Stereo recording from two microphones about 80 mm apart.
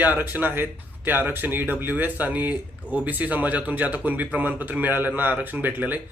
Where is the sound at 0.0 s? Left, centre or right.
Right.